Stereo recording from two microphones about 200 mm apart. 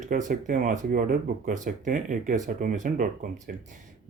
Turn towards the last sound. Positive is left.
turn(degrees=-40)  # may be behind; listen again after turning